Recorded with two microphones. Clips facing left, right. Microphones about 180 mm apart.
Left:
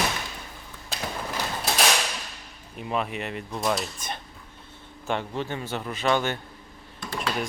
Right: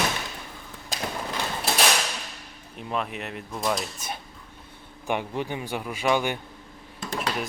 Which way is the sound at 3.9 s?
5° right (ahead or behind).